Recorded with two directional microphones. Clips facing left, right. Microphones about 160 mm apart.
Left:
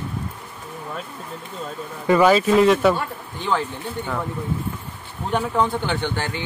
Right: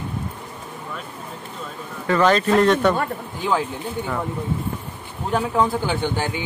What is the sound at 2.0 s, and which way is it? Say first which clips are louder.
Speech: left 2 dB; 10° left (ahead or behind).